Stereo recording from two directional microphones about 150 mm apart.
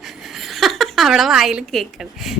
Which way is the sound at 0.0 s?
Centre (ahead or behind).